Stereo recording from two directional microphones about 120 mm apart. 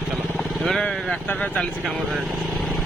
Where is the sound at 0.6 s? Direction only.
5° left (ahead or behind).